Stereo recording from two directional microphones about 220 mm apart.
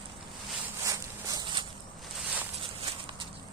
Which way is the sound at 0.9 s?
15° right (ahead or behind).